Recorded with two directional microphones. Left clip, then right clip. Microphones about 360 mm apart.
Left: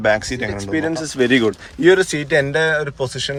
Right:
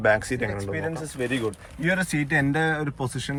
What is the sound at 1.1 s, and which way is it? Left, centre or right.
Speech, left.